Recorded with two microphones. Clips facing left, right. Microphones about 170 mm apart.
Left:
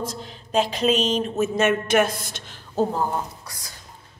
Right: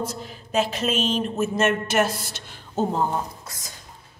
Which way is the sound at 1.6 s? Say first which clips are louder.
Left 2 dB; 55° left (ahead or behind).